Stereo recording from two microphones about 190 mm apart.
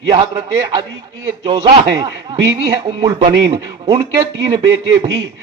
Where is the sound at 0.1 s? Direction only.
25° right (ahead or behind).